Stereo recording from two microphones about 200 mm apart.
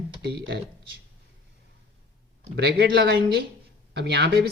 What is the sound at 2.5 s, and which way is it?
Speech, 55° right (ahead or behind).